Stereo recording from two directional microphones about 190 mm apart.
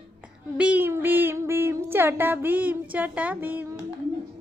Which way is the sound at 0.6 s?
10° right (ahead or behind).